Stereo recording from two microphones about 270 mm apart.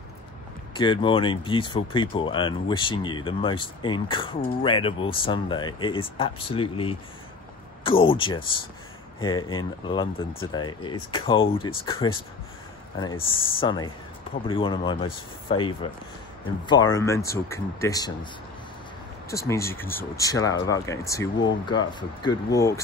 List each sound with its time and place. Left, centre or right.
0.7 s speech: centre
13.3 s speech: centre
19.3 s speech: centre